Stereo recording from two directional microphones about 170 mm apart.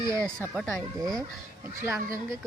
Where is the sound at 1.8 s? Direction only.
15° right (ahead or behind).